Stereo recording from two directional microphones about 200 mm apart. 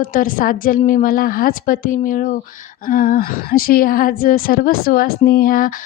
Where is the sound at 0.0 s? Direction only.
45° left (ahead or behind).